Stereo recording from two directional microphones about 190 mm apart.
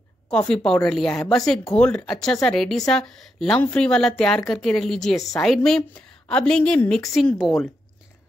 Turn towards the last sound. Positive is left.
turn(degrees=5)  # may be behind; listen again after turning